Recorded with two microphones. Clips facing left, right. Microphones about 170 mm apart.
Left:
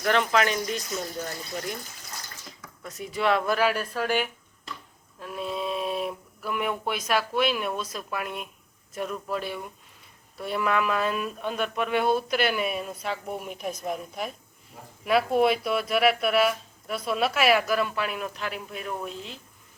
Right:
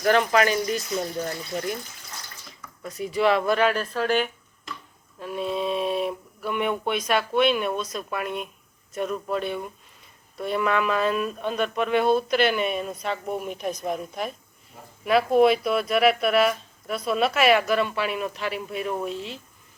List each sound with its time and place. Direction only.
0.0 s speech: 5° right (ahead or behind)
2.8 s speech: centre (ahead or behind)